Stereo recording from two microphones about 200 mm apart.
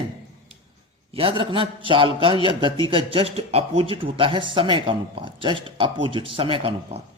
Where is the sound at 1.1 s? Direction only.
25° right (ahead or behind).